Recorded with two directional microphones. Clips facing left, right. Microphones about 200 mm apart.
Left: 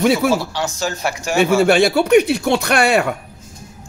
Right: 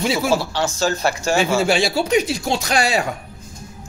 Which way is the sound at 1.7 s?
55° left (ahead or behind).